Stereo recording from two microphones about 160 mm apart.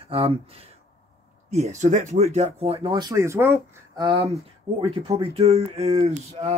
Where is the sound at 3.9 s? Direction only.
30° right (ahead or behind).